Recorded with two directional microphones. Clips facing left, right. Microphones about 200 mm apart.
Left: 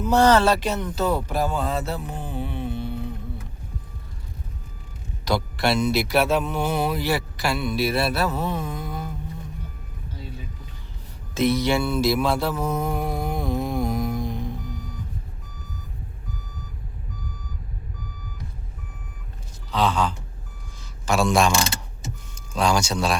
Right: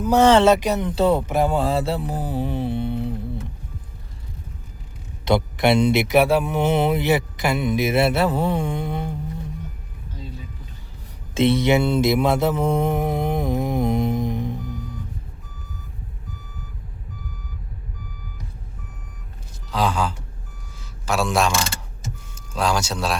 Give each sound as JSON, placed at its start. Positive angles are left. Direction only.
{"t": 0.2, "sound": "speech", "side_deg": -25}
{"t": 0.9, "sound": "mantra", "side_deg": -25}
{"t": 5.2, "sound": "speech", "side_deg": -20}
{"t": 11.3, "sound": "mantra", "side_deg": -25}
{"t": 19.7, "sound": "gasp", "side_deg": -10}
{"t": 20.7, "sound": "speech", "side_deg": -5}